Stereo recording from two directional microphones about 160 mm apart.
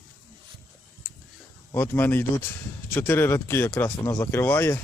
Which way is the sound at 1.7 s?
15° left (ahead or behind).